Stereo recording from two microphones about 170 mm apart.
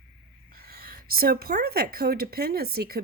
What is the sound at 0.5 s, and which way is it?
Speech, 60° right (ahead or behind).